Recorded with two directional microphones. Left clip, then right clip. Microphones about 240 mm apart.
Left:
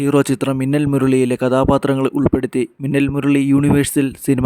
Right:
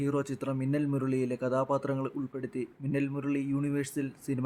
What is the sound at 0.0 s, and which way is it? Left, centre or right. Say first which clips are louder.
A man's voice: left 16 dB; left.